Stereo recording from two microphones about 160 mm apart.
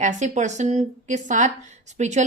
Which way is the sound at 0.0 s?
50° right (ahead or behind).